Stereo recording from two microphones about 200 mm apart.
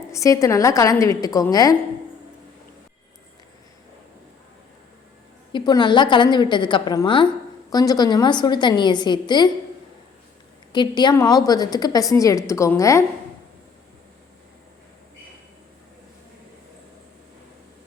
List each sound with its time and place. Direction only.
0.1 s a woman's voice: 15° left (ahead or behind)
5.5 s a woman's voice: 20° left (ahead or behind)
10.7 s a woman's voice: 20° left (ahead or behind)